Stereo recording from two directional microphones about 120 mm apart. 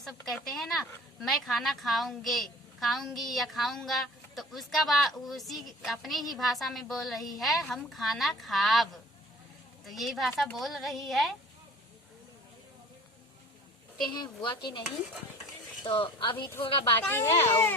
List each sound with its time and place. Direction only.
0.0 s a woman's voice: centre (ahead or behind)
14.2 s a woman's voice: 40° left (ahead or behind)
17.0 s speech: 20° left (ahead or behind)